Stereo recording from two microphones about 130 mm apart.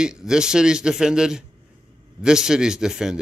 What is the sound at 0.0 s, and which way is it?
Speech, 5° right (ahead or behind).